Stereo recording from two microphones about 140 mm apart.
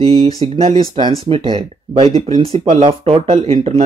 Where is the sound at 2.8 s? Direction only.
40° right (ahead or behind).